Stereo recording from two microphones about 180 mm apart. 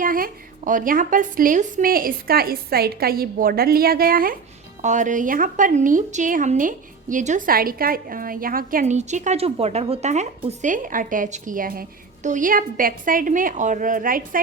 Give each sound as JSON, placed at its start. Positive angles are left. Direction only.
{"t": 0.0, "sound": "a woman's voice", "side_deg": -50}
{"t": 4.8, "sound": "a woman's voice", "side_deg": -45}